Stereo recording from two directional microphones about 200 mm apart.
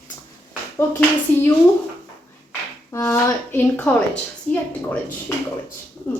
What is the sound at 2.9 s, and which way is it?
A woman's voice, 15° left (ahead or behind).